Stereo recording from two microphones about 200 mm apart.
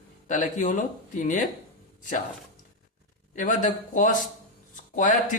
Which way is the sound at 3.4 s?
40° left (ahead or behind).